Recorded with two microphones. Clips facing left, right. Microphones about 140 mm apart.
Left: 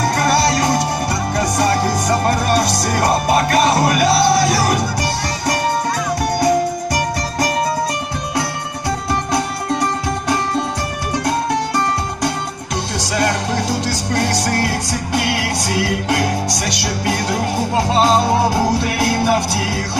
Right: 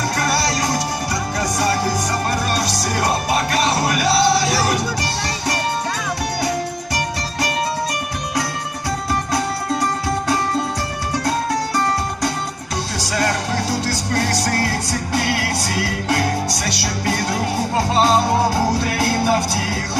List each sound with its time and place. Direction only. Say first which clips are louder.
2.5 s music: left 5 dB; 55° left (ahead or behind)
6.9 s music: left 4 dB; 45° left (ahead or behind)
15.1 s music: left 2 dB; 15° left (ahead or behind)
18.5 s music: left 2 dB; 15° left (ahead or behind)